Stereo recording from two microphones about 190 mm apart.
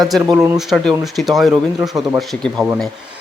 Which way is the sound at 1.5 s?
20° right (ahead or behind).